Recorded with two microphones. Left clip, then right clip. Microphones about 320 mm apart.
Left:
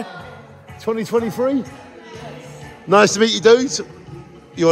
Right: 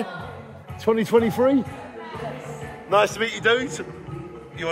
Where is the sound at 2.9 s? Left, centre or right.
Left.